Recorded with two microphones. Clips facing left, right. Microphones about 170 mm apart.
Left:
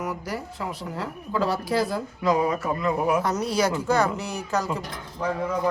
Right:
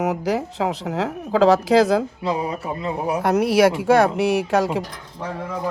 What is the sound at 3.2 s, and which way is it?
Speech, 60° right (ahead or behind).